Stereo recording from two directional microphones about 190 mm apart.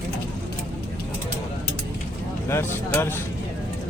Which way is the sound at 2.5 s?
10° left (ahead or behind).